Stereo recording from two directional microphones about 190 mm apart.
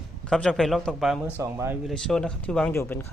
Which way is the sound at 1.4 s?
15° right (ahead or behind).